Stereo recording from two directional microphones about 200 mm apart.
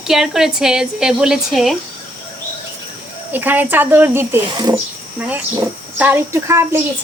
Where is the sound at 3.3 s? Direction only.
10° right (ahead or behind).